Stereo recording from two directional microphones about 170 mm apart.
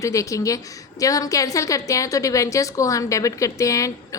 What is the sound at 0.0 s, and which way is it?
A woman's voice, 20° left (ahead or behind).